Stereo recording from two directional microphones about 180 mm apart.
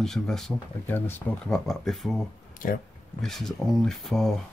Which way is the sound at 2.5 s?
50° left (ahead or behind).